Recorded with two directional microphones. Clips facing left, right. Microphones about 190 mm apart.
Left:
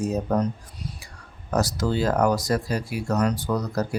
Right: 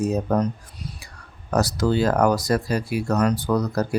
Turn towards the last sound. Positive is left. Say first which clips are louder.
# right 3 dB
turn(degrees=-65)  # may be behind; listen again after turning